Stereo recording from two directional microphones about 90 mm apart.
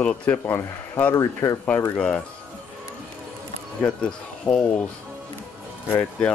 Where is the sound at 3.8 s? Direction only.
15° left (ahead or behind).